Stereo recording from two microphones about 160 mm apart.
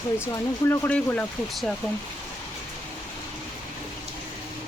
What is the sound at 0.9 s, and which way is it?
Speech, 10° left (ahead or behind).